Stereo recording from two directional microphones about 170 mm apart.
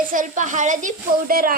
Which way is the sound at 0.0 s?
55° right (ahead or behind).